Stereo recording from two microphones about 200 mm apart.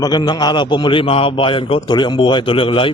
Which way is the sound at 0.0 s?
20° left (ahead or behind).